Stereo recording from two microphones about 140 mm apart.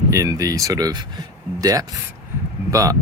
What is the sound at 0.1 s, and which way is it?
Speech, 25° right (ahead or behind).